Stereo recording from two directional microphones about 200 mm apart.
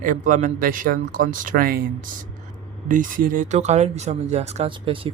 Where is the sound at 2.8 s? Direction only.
40° right (ahead or behind).